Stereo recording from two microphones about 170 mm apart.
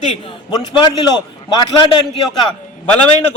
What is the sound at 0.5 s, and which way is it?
Speech, 25° left (ahead or behind).